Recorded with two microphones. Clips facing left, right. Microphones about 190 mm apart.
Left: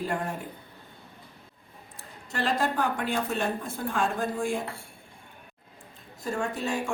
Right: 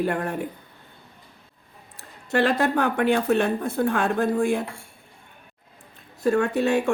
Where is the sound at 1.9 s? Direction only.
65° right (ahead or behind).